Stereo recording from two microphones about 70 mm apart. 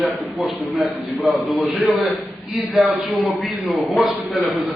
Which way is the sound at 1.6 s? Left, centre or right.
Right.